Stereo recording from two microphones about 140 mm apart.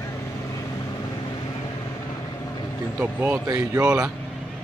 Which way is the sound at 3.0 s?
15° right (ahead or behind).